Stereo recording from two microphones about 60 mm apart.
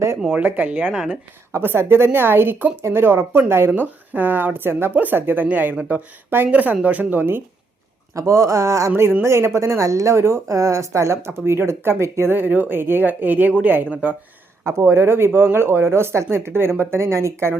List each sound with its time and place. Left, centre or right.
0.3 s speech: right
1.5 s speech: right
8.1 s speech: right
12.3 s speech: right
14.6 s speech: right